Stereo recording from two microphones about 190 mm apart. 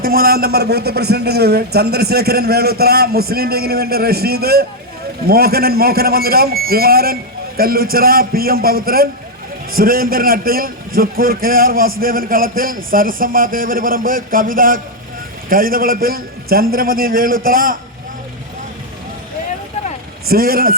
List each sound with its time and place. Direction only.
0.0 s a man's voice: 50° right (ahead or behind)
20.2 s a man's voice: 50° right (ahead or behind)